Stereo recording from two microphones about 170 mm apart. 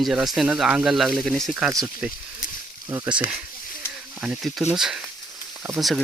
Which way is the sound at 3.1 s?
5° right (ahead or behind).